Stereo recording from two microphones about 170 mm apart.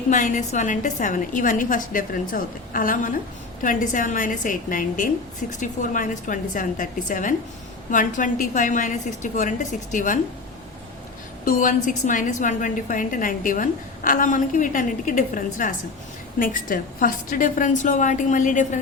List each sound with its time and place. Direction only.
0.1 s a woman's voice: 50° left (ahead or behind)
11.4 s a woman's voice: 50° left (ahead or behind)